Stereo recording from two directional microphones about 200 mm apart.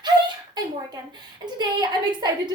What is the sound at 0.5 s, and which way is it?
A woman's voice, 20° right (ahead or behind).